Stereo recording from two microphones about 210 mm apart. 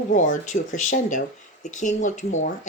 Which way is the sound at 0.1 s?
35° left (ahead or behind).